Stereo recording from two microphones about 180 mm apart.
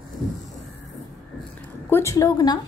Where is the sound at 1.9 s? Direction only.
15° left (ahead or behind).